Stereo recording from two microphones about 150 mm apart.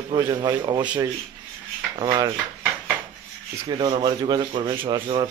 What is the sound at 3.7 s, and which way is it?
A man's voice, 30° right (ahead or behind).